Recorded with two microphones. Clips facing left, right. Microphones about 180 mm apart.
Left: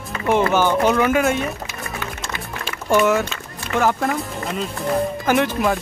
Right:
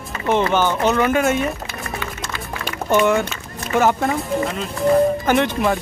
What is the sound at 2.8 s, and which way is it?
Speech, 5° left (ahead or behind).